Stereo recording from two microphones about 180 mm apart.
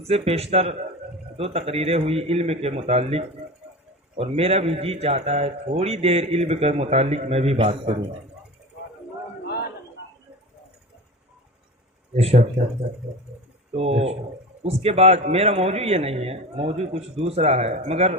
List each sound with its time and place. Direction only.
0.1 s a man's voice: 35° right (ahead or behind)
12.1 s a man's voice: 35° right (ahead or behind)
13.7 s a man's voice: 35° right (ahead or behind)